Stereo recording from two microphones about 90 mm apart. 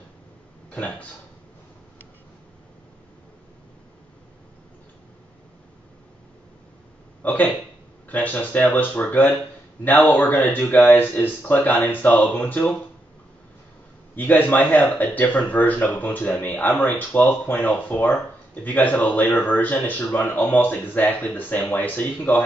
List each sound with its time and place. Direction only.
0.7 s a man's voice: 15° left (ahead or behind)
7.2 s speech: 20° left (ahead or behind)
14.1 s speech: 20° left (ahead or behind)